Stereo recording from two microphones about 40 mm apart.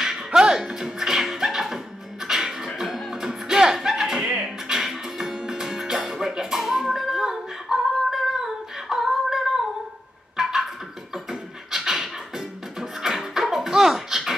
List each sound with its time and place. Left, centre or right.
0.0 s music: centre
4.2 s music: right
4.6 s music: centre
10.3 s a sound: centre
11.2 s beatboxing: centre
13.0 s a sound: centre